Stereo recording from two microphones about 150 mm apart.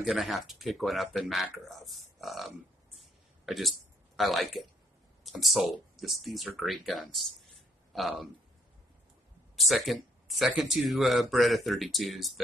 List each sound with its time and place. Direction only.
0.0 s speech: centre (ahead or behind)
3.0 s a sound: centre (ahead or behind)
4.2 s speech: centre (ahead or behind)
9.6 s speech: centre (ahead or behind)